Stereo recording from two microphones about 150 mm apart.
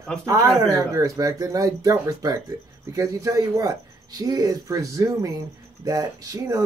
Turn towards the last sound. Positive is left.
turn(degrees=-25)  # may be behind; listen again after turning